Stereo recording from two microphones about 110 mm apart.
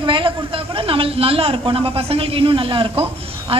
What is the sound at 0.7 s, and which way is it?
A woman's voice, 60° right (ahead or behind).